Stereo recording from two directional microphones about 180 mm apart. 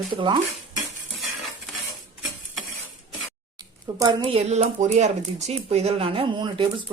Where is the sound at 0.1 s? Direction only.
30° right (ahead or behind).